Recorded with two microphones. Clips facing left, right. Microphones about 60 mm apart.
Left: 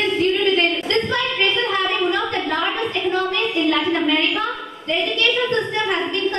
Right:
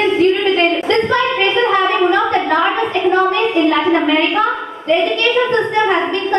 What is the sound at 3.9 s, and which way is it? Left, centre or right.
Speech, centre.